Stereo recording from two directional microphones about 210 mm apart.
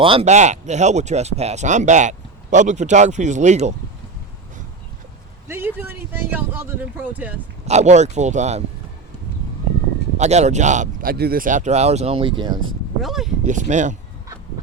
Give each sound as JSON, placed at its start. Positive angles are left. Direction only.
{"t": 0.0, "sound": "speech", "side_deg": -25}
{"t": 5.5, "sound": "speech", "side_deg": -10}
{"t": 7.7, "sound": "speech", "side_deg": -30}
{"t": 10.2, "sound": "speech", "side_deg": -35}
{"t": 13.0, "sound": "speech", "side_deg": 0}
{"t": 13.4, "sound": "speech", "side_deg": -35}